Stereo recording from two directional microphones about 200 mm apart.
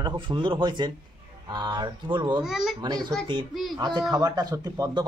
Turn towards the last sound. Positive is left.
turn(degrees=-20)  # may be behind; listen again after turning